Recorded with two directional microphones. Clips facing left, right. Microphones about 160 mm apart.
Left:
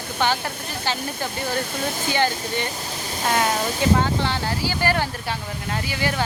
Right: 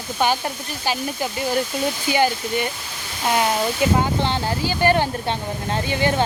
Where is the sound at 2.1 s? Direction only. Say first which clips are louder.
Right 3 dB; 15° right (ahead or behind).